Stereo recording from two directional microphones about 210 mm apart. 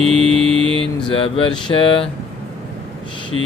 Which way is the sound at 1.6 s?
25° left (ahead or behind).